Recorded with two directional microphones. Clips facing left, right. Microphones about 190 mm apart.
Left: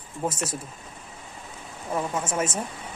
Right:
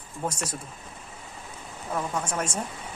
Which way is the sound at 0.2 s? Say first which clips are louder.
Left 3 dB; 5° left (ahead or behind).